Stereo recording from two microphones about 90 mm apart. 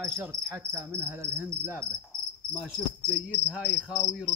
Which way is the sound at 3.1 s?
Centre (ahead or behind).